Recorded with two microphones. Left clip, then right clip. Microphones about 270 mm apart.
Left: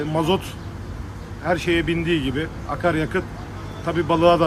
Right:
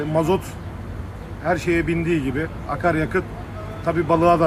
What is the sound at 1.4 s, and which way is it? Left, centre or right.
Speech, centre.